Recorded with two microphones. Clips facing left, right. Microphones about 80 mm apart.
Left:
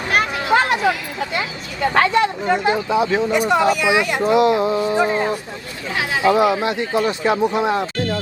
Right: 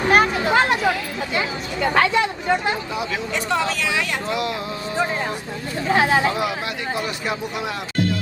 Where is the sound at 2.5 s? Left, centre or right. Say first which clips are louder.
Left 4 dB; left.